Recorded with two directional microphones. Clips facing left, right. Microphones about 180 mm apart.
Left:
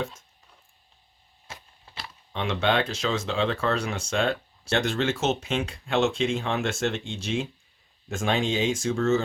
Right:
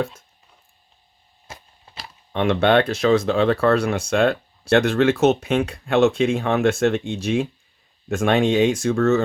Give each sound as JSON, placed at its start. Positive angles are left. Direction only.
{"t": 2.3, "sound": "speech", "side_deg": -60}